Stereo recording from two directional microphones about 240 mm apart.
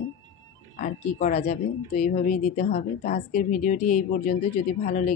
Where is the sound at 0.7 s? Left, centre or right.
Left.